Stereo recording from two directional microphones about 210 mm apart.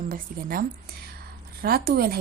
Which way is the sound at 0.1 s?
45° right (ahead or behind).